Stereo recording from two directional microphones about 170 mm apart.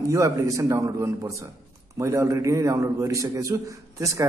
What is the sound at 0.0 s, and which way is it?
A man's voice, 20° right (ahead or behind).